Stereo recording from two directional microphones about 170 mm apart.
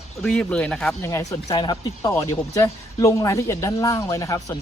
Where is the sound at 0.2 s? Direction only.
5° left (ahead or behind).